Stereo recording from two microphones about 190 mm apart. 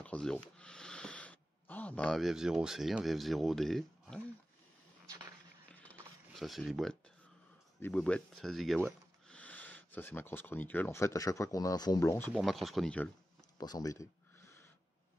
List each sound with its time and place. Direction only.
0.0 s speech: 5° left (ahead or behind)
5.7 s a sound: 5° left (ahead or behind)
7.8 s speech: 5° left (ahead or behind)
12.3 s speech: centre (ahead or behind)
13.6 s speech: 20° left (ahead or behind)